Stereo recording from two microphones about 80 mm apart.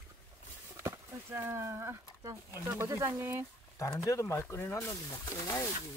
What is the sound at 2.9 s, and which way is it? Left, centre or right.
Speech, right.